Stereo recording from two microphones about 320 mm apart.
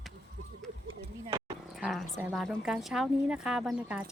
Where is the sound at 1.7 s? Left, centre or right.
Centre.